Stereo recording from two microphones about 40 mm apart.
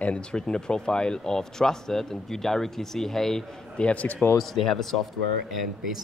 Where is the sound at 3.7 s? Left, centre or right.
Left.